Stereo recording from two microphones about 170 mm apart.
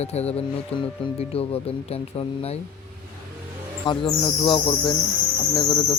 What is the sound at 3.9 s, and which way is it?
Bird, 25° left (ahead or behind).